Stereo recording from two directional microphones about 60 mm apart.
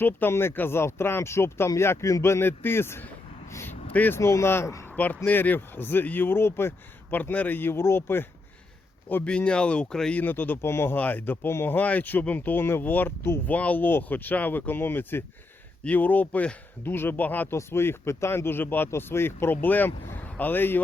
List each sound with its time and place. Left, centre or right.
0.0 s speech: left
3.7 s vehicle: left
4.2 s speech: left
4.9 s speech: left
7.1 s speech: left
9.2 s speech: centre
10.2 s speech: left
10.6 s speech: left
10.9 s speech: left
13.5 s speech: left
15.8 s speech: left
16.8 s speech: left
17.5 s speech: left